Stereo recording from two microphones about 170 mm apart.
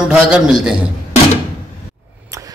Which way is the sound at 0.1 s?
5° right (ahead or behind).